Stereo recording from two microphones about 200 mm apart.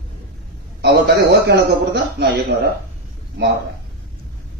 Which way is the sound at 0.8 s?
55° right (ahead or behind).